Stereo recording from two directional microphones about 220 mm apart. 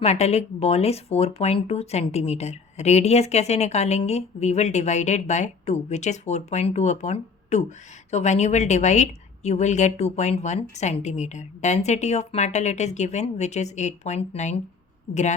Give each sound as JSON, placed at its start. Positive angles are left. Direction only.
{"t": 0.0, "sound": "a woman's voice", "side_deg": 30}